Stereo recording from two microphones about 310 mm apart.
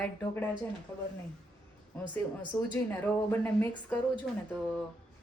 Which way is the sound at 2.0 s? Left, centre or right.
Centre.